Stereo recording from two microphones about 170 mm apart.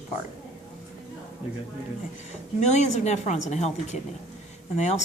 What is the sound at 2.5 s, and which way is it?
A woman's voice, 45° left (ahead or behind).